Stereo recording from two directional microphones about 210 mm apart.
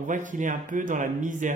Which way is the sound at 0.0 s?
40° right (ahead or behind).